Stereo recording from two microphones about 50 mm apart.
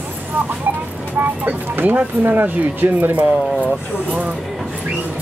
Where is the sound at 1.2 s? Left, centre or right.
Right.